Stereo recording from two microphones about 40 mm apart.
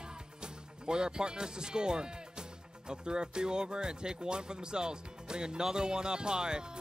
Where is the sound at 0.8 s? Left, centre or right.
Centre.